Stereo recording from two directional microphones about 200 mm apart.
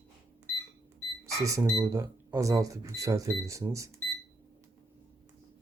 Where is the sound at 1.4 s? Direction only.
15° right (ahead or behind).